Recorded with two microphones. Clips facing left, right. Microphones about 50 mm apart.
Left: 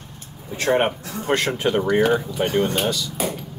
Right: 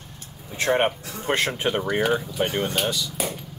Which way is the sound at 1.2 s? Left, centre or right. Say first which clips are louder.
Left 2 dB; centre.